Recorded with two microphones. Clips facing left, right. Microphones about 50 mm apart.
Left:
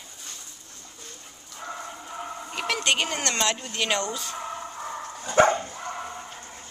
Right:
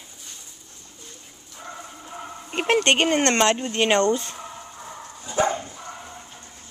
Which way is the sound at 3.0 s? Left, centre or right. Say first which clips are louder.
Right 8 dB; right.